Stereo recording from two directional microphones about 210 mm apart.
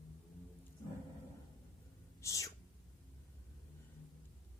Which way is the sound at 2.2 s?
15° left (ahead or behind).